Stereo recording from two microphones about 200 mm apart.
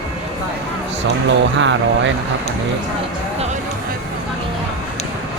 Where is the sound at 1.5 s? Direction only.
65° right (ahead or behind).